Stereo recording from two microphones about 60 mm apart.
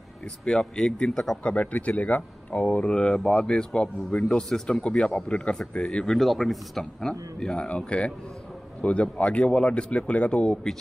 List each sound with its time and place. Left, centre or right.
0.5 s speech: centre
1.4 s speech: left
6.0 s speech: centre